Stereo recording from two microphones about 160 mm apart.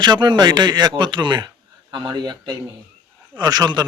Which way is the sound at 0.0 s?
25° right (ahead or behind).